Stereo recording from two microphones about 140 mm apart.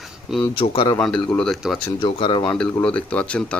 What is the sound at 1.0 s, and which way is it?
Speech, 5° left (ahead or behind).